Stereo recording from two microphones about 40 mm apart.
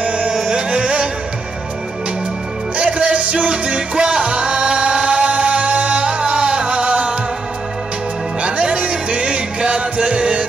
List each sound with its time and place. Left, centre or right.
0.0 s music: right
2.8 s music: right
8.4 s music: right